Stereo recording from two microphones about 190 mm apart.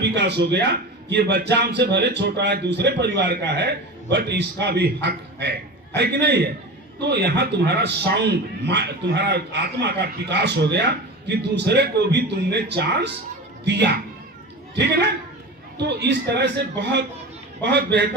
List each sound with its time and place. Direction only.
0.0 s a man's voice: 65° right (ahead or behind)
15.8 s a man's voice: 60° right (ahead or behind)